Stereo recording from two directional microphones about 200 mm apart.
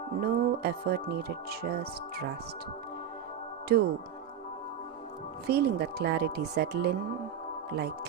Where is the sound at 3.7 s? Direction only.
55° right (ahead or behind).